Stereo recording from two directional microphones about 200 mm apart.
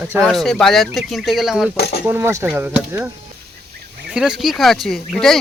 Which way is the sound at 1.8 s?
50° left (ahead or behind).